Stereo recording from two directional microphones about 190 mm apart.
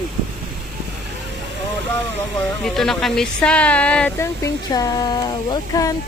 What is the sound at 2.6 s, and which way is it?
Speech, centre (ahead or behind).